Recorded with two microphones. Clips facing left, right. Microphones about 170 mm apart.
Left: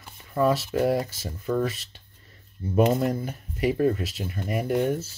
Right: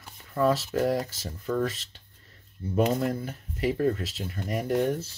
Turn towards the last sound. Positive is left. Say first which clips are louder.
# left 1 dB
turn(degrees=5)  # may be behind; listen again after turning